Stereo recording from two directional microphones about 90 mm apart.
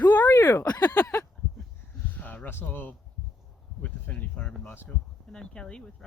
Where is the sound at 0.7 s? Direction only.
50° left (ahead or behind).